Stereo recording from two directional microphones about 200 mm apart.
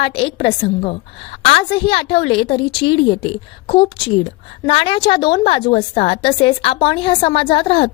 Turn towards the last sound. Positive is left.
turn(degrees=25)  # may be behind; listen again after turning